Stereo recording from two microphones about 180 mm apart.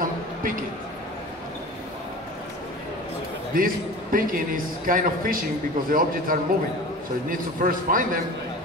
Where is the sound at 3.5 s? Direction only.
50° right (ahead or behind).